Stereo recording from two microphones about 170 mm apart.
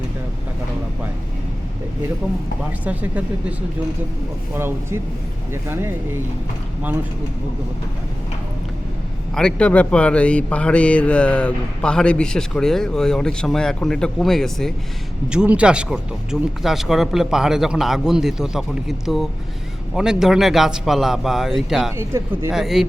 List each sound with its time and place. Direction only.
2.8 s speech: 10° right (ahead or behind)
4.5 s speech: 15° right (ahead or behind)
9.3 s a man's voice: 5° left (ahead or behind)
21.9 s speech: 15° right (ahead or behind)
22.5 s a man's voice: centre (ahead or behind)